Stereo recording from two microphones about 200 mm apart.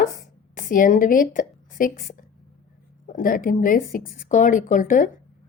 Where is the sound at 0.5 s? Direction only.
40° left (ahead or behind).